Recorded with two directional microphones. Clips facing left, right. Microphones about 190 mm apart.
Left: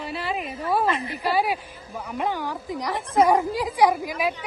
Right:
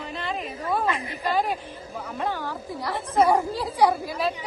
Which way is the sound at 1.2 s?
10° left (ahead or behind).